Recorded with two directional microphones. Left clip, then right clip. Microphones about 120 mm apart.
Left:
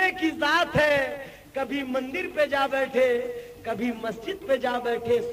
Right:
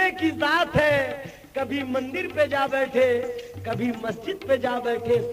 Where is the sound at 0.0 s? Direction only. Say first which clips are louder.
Right 1 dB; 40° left (ahead or behind).